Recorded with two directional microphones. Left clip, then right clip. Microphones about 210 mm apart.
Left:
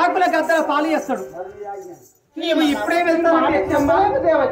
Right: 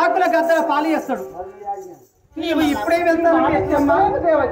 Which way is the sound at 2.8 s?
15° right (ahead or behind).